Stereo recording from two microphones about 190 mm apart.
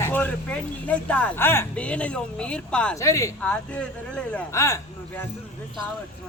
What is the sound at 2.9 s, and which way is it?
Speech, 15° left (ahead or behind).